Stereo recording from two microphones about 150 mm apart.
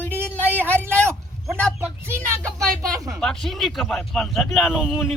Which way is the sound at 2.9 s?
20° right (ahead or behind).